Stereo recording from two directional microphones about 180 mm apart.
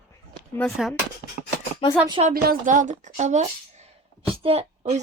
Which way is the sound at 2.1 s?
30° right (ahead or behind).